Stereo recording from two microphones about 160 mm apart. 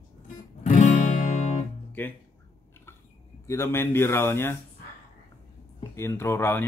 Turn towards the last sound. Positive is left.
turn(degrees=15)  # may be behind; listen again after turning